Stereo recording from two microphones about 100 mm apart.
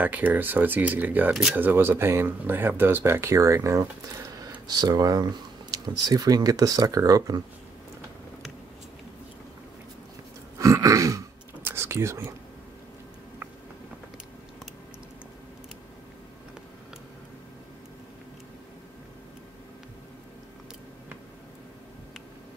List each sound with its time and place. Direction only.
0.0 s speech: 15° right (ahead or behind)
4.4 s speech: 40° right (ahead or behind)
10.6 s throat clearing: 35° right (ahead or behind)